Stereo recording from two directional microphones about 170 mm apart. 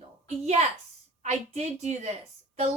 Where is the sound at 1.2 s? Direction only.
40° right (ahead or behind).